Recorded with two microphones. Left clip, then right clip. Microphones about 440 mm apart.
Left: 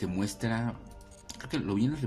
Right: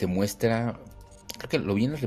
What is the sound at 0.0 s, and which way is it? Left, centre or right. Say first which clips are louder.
Speech: right 8 dB; centre.